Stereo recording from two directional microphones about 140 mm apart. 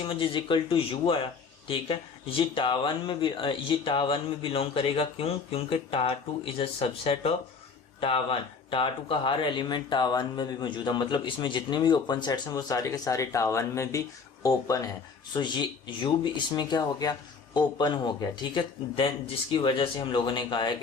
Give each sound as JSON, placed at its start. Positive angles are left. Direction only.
{"t": 0.0, "sound": "speech", "side_deg": 40}